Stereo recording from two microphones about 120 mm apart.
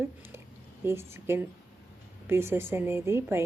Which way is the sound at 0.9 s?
20° right (ahead or behind).